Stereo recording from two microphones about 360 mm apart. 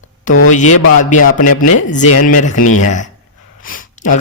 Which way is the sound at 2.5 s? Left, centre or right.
Left.